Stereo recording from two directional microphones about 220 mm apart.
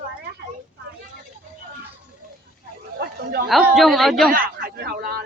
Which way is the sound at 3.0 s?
45° right (ahead or behind).